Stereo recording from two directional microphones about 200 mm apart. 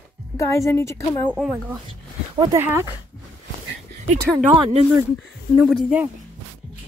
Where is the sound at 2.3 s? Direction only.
25° right (ahead or behind).